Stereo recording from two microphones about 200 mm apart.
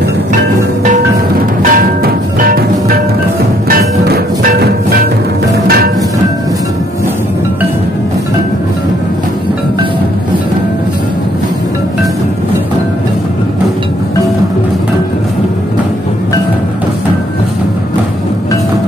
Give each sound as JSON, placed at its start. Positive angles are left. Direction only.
{"t": 1.6, "sound": "music", "side_deg": -45}